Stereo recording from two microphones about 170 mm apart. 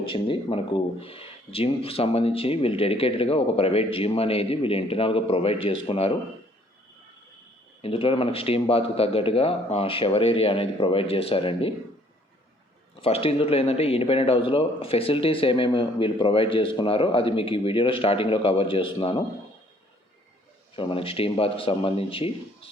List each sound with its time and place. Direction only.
0.0 s speech: 30° left (ahead or behind)
7.8 s speech: 35° left (ahead or behind)
13.0 s speech: 35° left (ahead or behind)
20.7 s speech: 30° left (ahead or behind)